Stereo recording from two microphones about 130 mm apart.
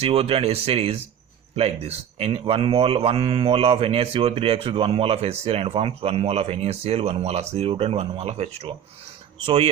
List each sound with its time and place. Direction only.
0.0 s speech: 50° right (ahead or behind)